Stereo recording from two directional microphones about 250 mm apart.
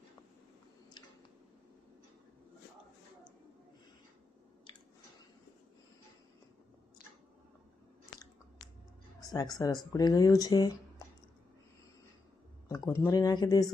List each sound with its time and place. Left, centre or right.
9.3 s speech: centre
12.6 s a sound: centre
13.1 s speech: centre